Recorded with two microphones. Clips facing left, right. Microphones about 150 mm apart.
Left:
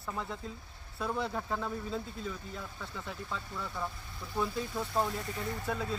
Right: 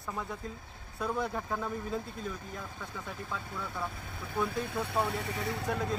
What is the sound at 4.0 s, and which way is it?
Speech, 60° right (ahead or behind).